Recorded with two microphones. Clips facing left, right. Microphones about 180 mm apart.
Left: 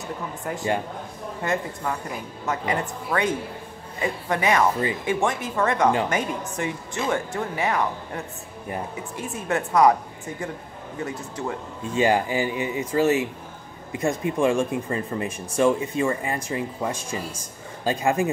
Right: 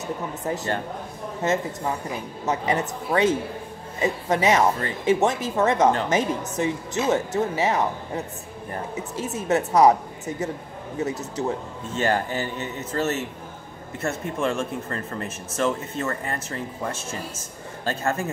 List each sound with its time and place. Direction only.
0.5 s speech: 30° right (ahead or behind)
11.9 s speech: 10° left (ahead or behind)